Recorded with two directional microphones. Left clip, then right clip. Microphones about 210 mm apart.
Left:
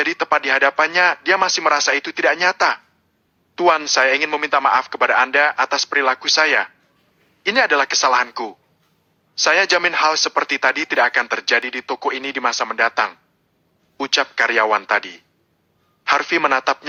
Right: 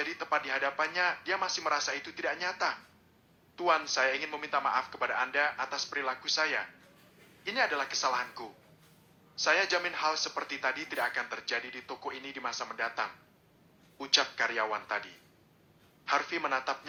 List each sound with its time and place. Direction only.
0.0 s a man's voice: 50° left (ahead or behind)